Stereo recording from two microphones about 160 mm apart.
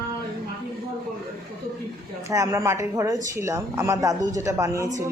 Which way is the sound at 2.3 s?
20° right (ahead or behind).